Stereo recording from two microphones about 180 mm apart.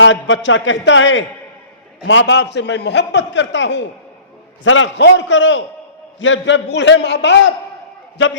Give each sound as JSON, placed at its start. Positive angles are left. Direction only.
{"t": 0.0, "sound": "a man's voice", "side_deg": 90}